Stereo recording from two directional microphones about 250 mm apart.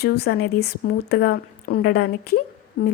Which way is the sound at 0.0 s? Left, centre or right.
Left.